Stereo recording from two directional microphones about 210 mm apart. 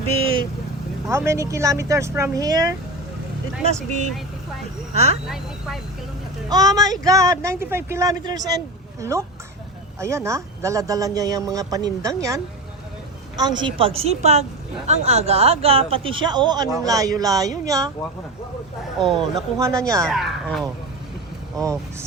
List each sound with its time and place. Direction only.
0.1 s vehicle: 80° right
1.0 s speech: 10° right (ahead or behind)
5.3 s speech: centre (ahead or behind)
6.5 s speech: 15° right (ahead or behind)
18.9 s speech: centre (ahead or behind)
19.5 s speech: 15° right (ahead or behind)
20.1 s speech: centre (ahead or behind)
21.6 s speech: 15° right (ahead or behind)